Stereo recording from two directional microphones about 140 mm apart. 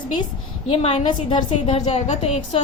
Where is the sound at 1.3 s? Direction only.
50° left (ahead or behind).